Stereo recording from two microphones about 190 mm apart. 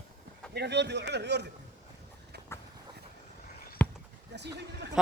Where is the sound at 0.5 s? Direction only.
60° right (ahead or behind).